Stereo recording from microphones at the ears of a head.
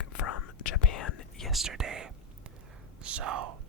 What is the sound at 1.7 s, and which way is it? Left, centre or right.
Speech, right.